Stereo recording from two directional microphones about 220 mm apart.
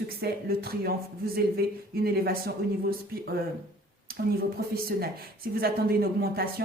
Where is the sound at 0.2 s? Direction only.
45° right (ahead or behind).